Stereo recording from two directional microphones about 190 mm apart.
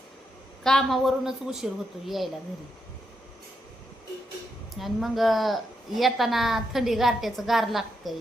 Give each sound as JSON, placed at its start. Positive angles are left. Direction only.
{"t": 0.6, "sound": "a woman's voice", "side_deg": 0}
{"t": 4.8, "sound": "a woman's voice", "side_deg": 0}